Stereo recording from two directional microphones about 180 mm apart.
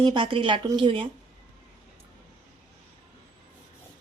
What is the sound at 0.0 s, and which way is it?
A woman's voice, 25° right (ahead or behind).